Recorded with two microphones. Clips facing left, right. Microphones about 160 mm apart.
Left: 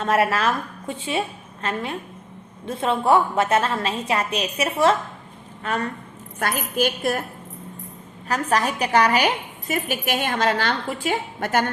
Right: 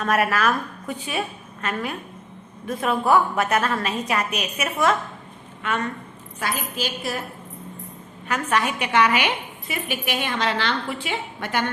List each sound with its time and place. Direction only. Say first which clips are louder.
0.0 s a woman's voice: left 1 dB; 25° left (ahead or behind)
6.4 s a woman's voice: left 5 dB; 55° left (ahead or behind)
8.3 s a woman's voice: left 1 dB; 35° left (ahead or behind)